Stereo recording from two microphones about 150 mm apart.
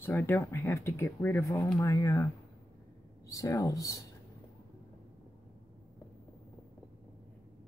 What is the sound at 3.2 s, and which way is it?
Speech, 20° left (ahead or behind).